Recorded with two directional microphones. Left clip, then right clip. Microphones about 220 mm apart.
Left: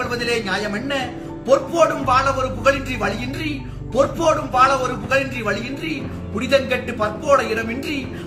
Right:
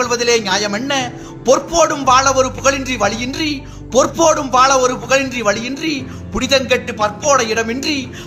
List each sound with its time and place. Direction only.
0.0 s a man's voice: 50° right (ahead or behind)